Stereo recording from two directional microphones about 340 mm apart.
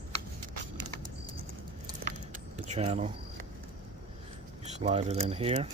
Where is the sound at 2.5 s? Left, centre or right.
Centre.